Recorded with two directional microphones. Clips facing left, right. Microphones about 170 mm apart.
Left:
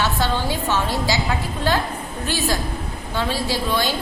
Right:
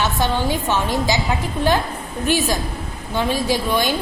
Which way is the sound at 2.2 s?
15° right (ahead or behind).